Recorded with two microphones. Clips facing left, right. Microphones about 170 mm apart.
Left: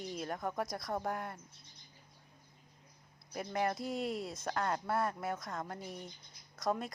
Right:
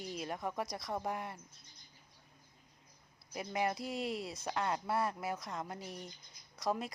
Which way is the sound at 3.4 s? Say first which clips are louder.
Left 1 dB; 5° right (ahead or behind).